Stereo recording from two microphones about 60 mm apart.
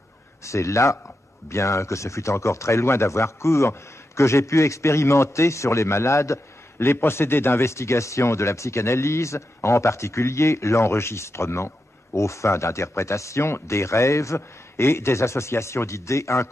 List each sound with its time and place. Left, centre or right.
0.4 s speech: left